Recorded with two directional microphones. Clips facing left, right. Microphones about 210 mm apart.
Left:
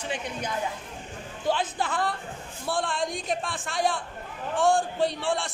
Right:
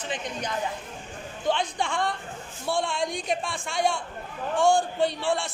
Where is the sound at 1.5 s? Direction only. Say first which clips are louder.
Even; 5° left (ahead or behind).